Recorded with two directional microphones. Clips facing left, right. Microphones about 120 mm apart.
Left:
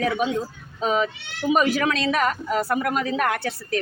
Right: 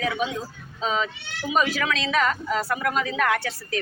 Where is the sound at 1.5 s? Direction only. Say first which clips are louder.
Left 4 dB; 50° left (ahead or behind).